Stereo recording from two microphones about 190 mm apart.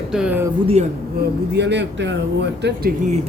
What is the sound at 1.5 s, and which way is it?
Speech, 65° right (ahead or behind).